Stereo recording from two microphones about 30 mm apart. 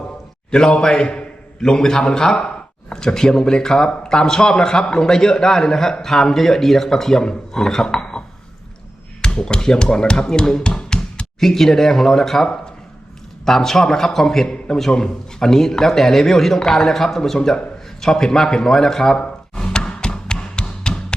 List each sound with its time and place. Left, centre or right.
0.5 s speech: centre
9.2 s speech: left
11.3 s speech: centre
19.1 s tap: left